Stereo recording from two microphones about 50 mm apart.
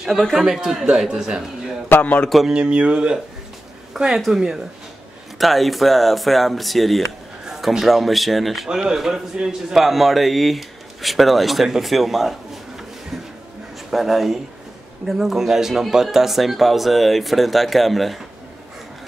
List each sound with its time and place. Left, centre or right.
0.2 s a man's voice: centre
0.9 s speech: centre
2.0 s speech: left
2.4 s speech: centre
3.9 s a man's voice: centre
8.6 s a man's voice: centre
13.8 s a man's voice: centre